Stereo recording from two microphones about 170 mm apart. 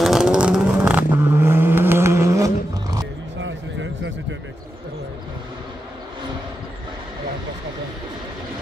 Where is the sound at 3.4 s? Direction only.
90° right.